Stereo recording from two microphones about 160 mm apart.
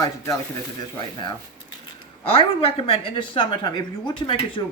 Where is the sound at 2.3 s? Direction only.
35° left (ahead or behind).